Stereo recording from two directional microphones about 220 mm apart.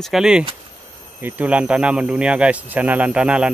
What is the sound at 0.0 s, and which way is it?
Speech, centre (ahead or behind).